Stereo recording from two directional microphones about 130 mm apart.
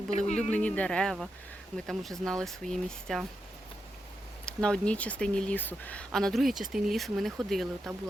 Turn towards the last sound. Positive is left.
turn(degrees=0)  # may be behind; listen again after turning